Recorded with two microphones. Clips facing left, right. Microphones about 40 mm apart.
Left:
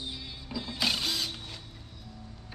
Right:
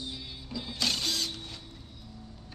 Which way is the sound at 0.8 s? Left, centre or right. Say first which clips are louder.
Left 1 dB; centre.